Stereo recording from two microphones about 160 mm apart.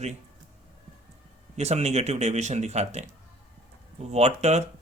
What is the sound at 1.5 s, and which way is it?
Speech, 45° right (ahead or behind).